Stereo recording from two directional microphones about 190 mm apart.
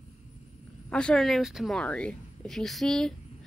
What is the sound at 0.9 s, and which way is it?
Speech, 5° left (ahead or behind).